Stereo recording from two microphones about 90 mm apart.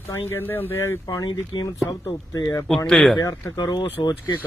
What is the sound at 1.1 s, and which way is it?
Speech, 55° left (ahead or behind).